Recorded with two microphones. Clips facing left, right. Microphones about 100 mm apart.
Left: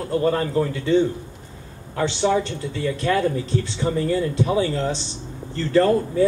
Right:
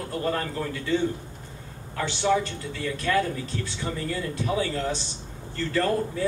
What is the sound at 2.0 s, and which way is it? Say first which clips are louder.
Speech: left 4 dB; 25° left (ahead or behind).